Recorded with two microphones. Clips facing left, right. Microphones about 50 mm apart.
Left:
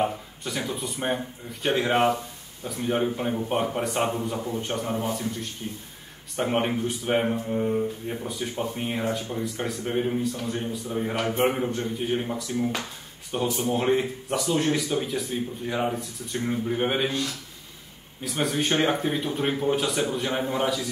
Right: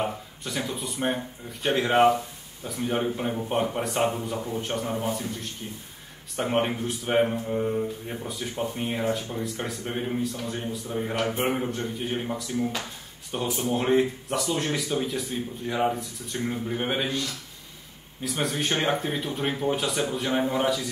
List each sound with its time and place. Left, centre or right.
0.4 s speech: centre
18.2 s speech: centre